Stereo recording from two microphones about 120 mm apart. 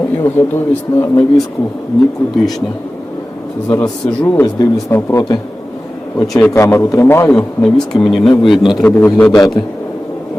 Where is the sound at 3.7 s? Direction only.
15° left (ahead or behind).